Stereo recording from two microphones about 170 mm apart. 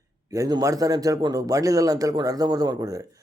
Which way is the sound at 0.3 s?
20° right (ahead or behind).